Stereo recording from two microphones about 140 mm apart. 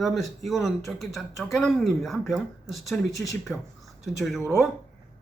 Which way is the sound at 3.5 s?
10° left (ahead or behind).